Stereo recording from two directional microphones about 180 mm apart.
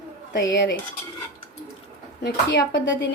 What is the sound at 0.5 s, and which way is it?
Speech, 80° left.